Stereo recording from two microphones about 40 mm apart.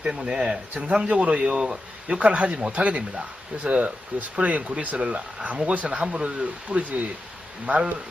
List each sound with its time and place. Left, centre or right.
0.0 s speech: right
7.7 s speech: right